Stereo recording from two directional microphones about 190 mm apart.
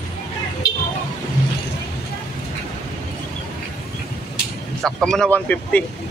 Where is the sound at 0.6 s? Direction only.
75° left (ahead or behind).